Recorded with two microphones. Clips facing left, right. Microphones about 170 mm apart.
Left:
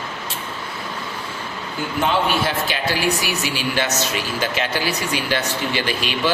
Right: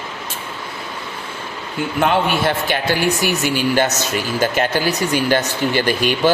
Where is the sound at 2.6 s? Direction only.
50° right (ahead or behind).